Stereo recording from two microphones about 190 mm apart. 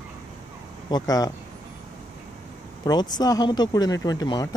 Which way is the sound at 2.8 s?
20° left (ahead or behind).